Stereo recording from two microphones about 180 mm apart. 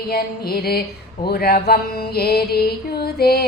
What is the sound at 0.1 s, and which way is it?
Child singing, 60° left (ahead or behind).